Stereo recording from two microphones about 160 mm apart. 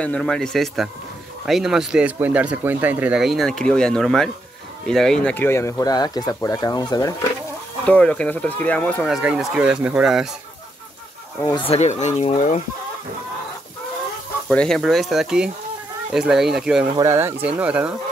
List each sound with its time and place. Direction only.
0.0 s speech: 5° left (ahead or behind); by 7.2 s 25° left (ahead or behind)
7.8 s speech: 5° left (ahead or behind)
9.0 s speech: 5° right (ahead or behind)
11.4 s speech: 30° left (ahead or behind)
14.5 s speech: 5° left (ahead or behind)
16.9 s speech: 15° right (ahead or behind)